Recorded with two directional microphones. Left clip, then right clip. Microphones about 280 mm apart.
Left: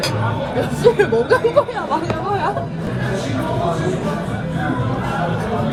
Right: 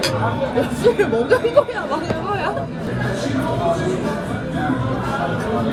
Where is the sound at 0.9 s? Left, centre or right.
Centre.